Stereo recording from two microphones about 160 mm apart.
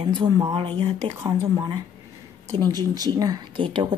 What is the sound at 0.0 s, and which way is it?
Speech, 30° right (ahead or behind).